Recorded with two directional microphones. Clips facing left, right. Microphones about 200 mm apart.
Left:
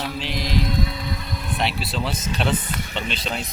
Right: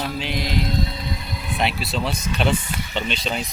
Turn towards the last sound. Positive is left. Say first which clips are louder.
# right 2 dB
turn(degrees=0)  # may be behind; listen again after turning